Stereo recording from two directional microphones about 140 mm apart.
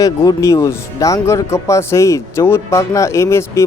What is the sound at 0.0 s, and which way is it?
Speech, 25° left (ahead or behind).